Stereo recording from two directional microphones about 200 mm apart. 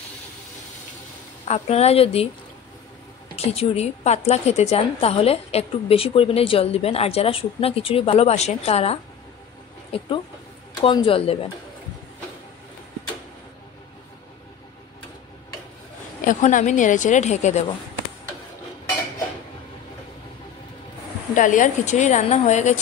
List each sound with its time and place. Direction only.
1.5 s a woman's voice: 30° left (ahead or behind)
3.3 s a woman's voice: 30° left (ahead or behind)
16.3 s a woman's voice: 40° left (ahead or behind)
21.4 s a woman's voice: 40° left (ahead or behind)